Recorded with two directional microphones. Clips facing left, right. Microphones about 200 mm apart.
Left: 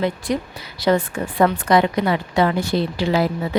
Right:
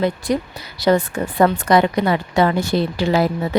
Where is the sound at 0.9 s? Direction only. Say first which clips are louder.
Right 2 dB; 40° right (ahead or behind).